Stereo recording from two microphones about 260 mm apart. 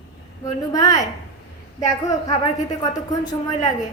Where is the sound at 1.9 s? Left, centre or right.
Centre.